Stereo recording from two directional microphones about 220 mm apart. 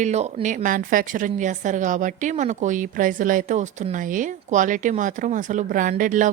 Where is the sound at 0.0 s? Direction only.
30° right (ahead or behind).